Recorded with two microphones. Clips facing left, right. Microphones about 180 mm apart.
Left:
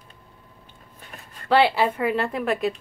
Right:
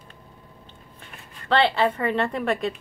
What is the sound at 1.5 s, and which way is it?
A woman's voice, 10° left (ahead or behind).